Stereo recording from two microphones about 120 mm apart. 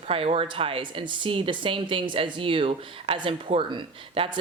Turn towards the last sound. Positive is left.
turn(degrees=-45)  # may be behind; listen again after turning